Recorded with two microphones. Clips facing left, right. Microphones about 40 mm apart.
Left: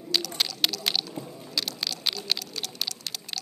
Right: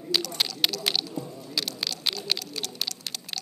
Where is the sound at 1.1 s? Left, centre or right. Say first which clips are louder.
Right 3 dB; centre.